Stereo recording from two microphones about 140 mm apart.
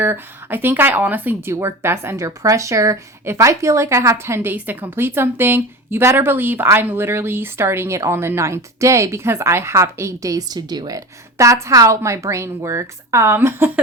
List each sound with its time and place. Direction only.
0.0 s a woman's voice: 15° right (ahead or behind)